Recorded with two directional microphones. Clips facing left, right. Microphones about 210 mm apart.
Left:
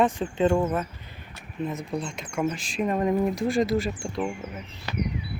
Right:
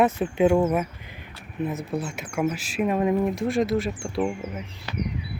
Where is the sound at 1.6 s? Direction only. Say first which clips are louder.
Right 2 dB; 5° right (ahead or behind).